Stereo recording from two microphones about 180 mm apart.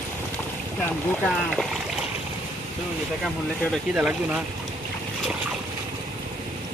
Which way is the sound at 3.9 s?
5° right (ahead or behind).